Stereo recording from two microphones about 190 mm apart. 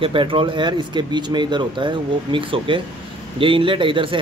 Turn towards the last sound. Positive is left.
turn(degrees=-25)  # may be behind; listen again after turning